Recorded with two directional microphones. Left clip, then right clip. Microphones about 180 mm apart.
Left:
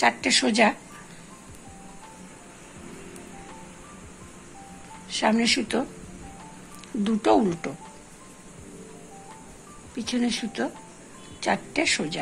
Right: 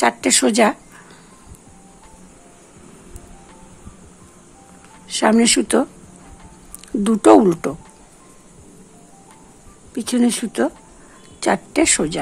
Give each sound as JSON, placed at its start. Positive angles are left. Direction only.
{"t": 0.0, "sound": "speech", "side_deg": -60}
{"t": 5.0, "sound": "speech", "side_deg": -60}
{"t": 7.0, "sound": "speech", "side_deg": -60}
{"t": 9.9, "sound": "speech", "side_deg": -60}